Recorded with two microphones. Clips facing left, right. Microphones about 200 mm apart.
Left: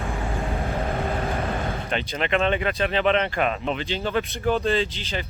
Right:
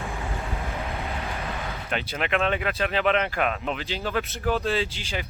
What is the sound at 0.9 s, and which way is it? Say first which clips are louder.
Vehicle: left 6 dB; 50° left (ahead or behind).